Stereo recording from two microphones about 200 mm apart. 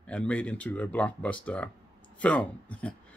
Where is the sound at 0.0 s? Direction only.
5° left (ahead or behind).